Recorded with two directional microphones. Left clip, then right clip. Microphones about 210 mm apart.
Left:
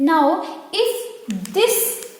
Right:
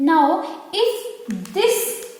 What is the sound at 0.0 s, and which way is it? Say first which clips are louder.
Speech: even; 45° left (ahead or behind).